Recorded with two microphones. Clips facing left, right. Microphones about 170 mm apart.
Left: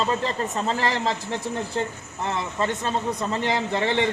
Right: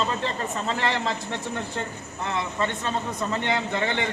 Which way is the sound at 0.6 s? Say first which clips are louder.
Left 1 dB; 35° left (ahead or behind).